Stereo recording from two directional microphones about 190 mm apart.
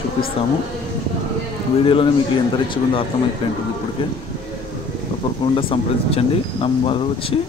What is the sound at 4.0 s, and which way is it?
Speech, 25° left (ahead or behind).